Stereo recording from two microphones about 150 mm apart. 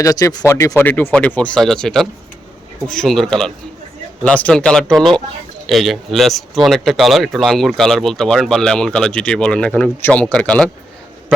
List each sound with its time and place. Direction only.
0.0 s speech: 25° left (ahead or behind)